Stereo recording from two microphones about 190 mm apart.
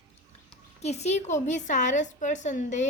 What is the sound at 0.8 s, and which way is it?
A woman's voice, 35° left (ahead or behind).